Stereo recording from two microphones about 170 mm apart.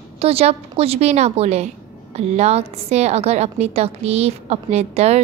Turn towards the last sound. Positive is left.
turn(degrees=-40)  # may be behind; listen again after turning